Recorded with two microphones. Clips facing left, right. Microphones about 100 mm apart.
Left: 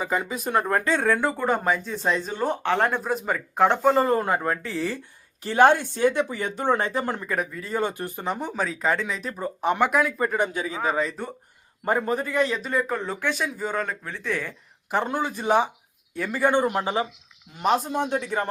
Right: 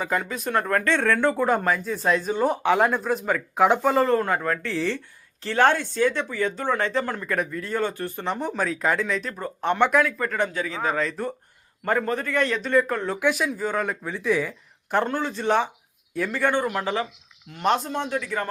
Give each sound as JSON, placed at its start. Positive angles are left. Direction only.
{"t": 0.0, "sound": "speech", "side_deg": 5}
{"t": 4.0, "sound": "speech", "side_deg": 15}
{"t": 4.6, "sound": "speech", "side_deg": 5}
{"t": 5.4, "sound": "speech", "side_deg": 15}
{"t": 7.3, "sound": "speech", "side_deg": 5}
{"t": 7.8, "sound": "speech", "side_deg": 15}
{"t": 10.8, "sound": "speech", "side_deg": 5}
{"t": 12.4, "sound": "speech", "side_deg": 5}
{"t": 13.8, "sound": "speech", "side_deg": -10}
{"t": 16.8, "sound": "speech", "side_deg": 15}
{"t": 17.5, "sound": "speech", "side_deg": 0}